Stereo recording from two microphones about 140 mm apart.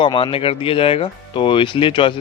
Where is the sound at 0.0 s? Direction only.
40° left (ahead or behind).